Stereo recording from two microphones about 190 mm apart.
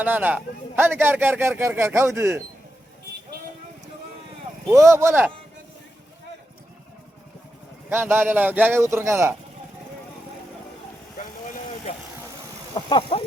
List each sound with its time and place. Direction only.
0.0 s speech: 10° right (ahead or behind)
4.7 s speech: 15° right (ahead or behind)
7.9 s speech: 10° right (ahead or behind)
12.7 s speech: 25° left (ahead or behind)